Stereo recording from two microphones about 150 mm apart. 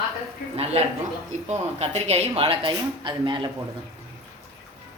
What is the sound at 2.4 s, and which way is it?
Speech, 35° right (ahead or behind).